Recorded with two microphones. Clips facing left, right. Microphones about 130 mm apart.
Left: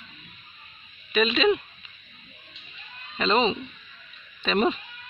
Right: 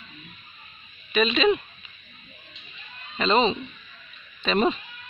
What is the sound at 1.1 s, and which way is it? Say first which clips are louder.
Speech: right 1 dB; 10° left (ahead or behind).